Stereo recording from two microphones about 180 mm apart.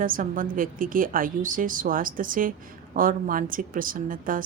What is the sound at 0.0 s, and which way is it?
A woman's voice, 50° right (ahead or behind).